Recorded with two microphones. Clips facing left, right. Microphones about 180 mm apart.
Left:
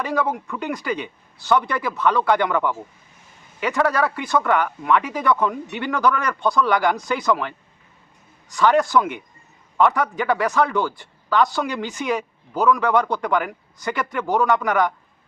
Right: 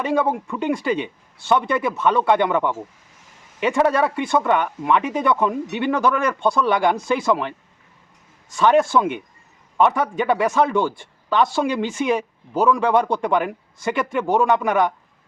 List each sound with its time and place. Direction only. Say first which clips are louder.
0.0 s a man's voice: right 3 dB; 25° right (ahead or behind)